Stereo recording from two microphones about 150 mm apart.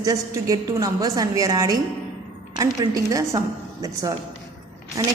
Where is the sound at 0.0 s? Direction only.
25° right (ahead or behind).